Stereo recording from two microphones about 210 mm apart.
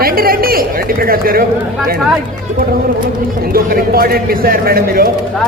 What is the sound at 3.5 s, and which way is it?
A man's voice, 45° right (ahead or behind).